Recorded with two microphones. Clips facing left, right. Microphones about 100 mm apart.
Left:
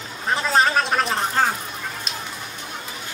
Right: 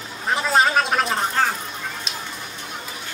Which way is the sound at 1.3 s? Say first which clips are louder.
Left 1 dB; 10° left (ahead or behind).